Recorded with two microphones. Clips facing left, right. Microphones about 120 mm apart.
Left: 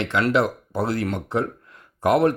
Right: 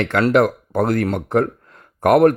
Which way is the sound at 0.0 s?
50° right (ahead or behind).